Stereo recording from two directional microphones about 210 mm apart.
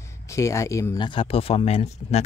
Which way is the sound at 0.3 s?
15° left (ahead or behind).